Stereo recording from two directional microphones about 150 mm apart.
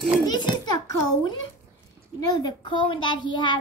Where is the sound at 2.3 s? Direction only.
30° left (ahead or behind).